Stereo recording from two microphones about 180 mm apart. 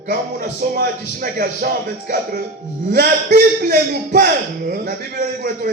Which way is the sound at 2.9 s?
55° right (ahead or behind).